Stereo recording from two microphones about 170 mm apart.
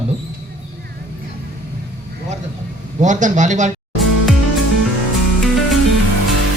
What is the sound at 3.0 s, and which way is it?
Speech, 45° right (ahead or behind).